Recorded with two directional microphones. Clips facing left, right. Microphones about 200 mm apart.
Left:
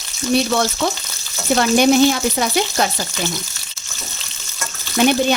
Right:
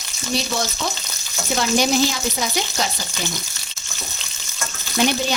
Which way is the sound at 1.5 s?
55° left (ahead or behind).